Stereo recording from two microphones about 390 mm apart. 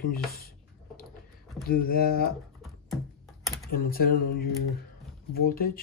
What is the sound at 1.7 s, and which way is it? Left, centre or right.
Speech, left.